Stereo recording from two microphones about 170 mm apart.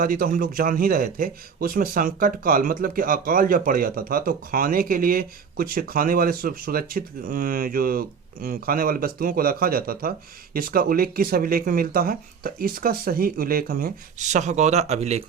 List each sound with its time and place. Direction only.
0.0 s a man's voice: 55° right (ahead or behind); by 15.2 s 40° right (ahead or behind)